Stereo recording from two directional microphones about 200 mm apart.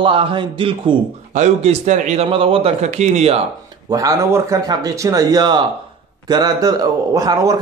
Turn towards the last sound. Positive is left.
turn(degrees=-15)  # may be behind; listen again after turning